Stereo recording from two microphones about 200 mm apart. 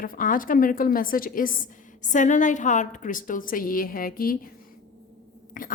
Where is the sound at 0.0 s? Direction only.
45° left (ahead or behind).